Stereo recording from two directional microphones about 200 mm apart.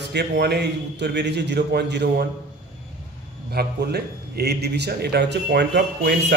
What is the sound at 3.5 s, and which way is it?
A man's voice, 55° right (ahead or behind).